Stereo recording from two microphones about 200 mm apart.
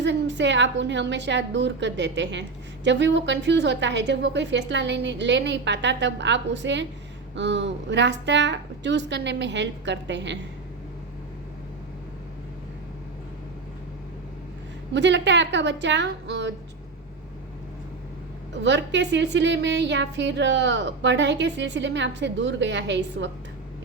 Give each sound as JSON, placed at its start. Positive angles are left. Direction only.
{"t": 0.0, "sound": "a woman's voice", "side_deg": -60}
{"t": 14.9, "sound": "a woman's voice", "side_deg": -60}
{"t": 18.6, "sound": "a woman's voice", "side_deg": -65}